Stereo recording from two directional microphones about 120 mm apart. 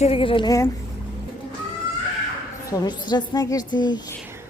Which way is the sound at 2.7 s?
35° left (ahead or behind).